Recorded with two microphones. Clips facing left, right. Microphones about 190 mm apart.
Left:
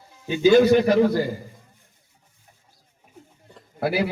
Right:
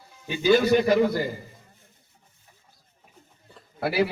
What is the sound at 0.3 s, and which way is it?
Speech, 45° left (ahead or behind).